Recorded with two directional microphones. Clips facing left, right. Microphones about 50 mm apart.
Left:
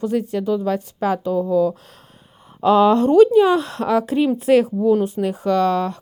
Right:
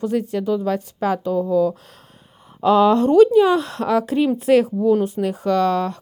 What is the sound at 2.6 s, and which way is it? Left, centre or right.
Speech, left.